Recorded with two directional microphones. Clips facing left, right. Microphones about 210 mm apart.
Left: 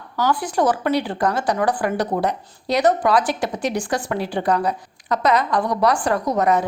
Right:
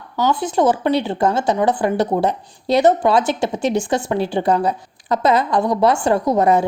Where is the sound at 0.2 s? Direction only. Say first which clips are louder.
Right 3 dB; 25° right (ahead or behind).